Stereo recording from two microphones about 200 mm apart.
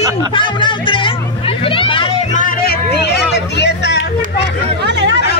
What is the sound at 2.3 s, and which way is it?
Vehicle, 45° left (ahead or behind).